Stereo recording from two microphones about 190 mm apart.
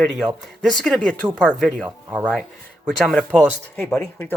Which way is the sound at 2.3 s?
5° left (ahead or behind).